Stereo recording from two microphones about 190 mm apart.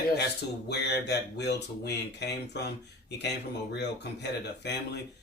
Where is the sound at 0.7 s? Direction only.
60° left (ahead or behind).